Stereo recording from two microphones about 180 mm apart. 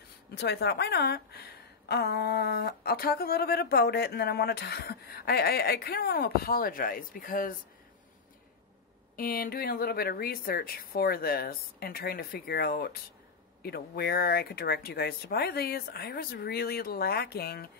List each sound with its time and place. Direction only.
0.3 s a woman's voice: 65° left (ahead or behind)
9.1 s a woman's voice: 55° left (ahead or behind)